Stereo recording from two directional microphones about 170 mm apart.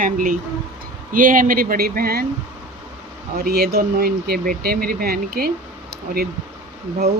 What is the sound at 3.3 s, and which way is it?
Speech, 70° right (ahead or behind).